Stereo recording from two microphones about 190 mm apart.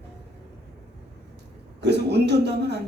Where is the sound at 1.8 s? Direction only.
65° right (ahead or behind).